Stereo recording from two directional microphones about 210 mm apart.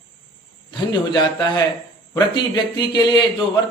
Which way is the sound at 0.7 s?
20° left (ahead or behind).